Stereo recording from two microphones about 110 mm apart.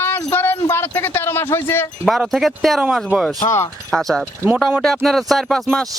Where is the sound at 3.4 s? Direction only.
25° left (ahead or behind).